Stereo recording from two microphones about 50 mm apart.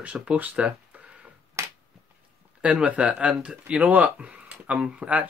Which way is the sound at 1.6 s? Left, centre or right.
Right.